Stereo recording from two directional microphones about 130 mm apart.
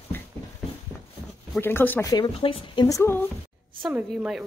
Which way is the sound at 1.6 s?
15° left (ahead or behind).